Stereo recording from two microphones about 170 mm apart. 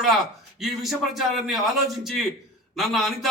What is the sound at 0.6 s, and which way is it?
A man's voice, centre (ahead or behind).